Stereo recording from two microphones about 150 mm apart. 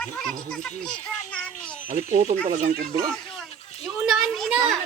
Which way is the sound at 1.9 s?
55° right (ahead or behind).